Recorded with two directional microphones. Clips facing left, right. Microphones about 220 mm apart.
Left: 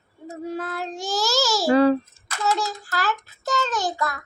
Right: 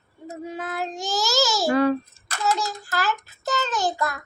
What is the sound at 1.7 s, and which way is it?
Babbling, 30° left (ahead or behind).